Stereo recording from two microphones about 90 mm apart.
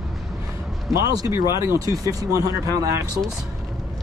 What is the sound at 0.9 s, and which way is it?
Speech, 40° right (ahead or behind).